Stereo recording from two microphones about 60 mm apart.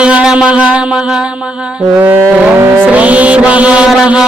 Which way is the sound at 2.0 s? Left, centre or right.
Right.